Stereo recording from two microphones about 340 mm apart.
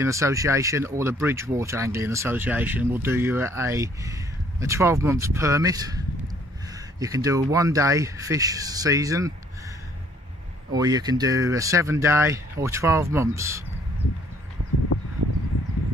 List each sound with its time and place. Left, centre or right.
0.0 s speech: centre
10.7 s speech: centre
14.9 s a sound: left